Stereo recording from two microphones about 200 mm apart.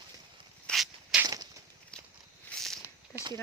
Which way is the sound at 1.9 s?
5° left (ahead or behind).